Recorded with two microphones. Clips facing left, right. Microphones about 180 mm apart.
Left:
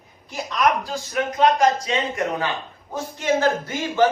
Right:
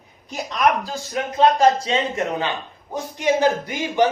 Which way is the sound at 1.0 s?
35° right (ahead or behind).